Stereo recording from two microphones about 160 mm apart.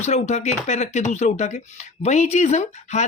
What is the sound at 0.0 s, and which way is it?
Speech, 45° left (ahead or behind).